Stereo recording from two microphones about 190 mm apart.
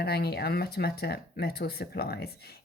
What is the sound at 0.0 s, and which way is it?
Speech, 55° left (ahead or behind).